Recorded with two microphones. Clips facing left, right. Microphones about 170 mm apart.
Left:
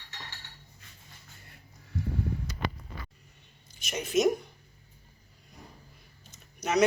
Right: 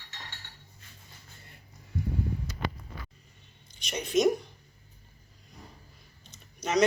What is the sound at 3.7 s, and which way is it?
Speech, 5° left (ahead or behind).